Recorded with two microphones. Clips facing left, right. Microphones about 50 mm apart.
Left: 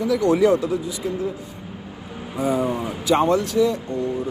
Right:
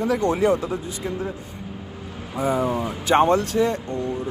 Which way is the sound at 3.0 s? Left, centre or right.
Right.